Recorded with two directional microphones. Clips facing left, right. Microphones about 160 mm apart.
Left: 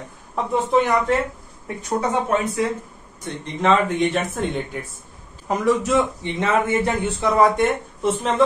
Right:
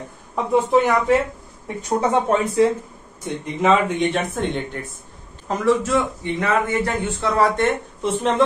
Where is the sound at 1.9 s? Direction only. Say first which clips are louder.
Right 3 dB; 30° right (ahead or behind).